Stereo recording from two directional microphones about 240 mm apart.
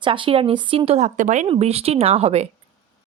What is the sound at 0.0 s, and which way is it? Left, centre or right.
Speech, right.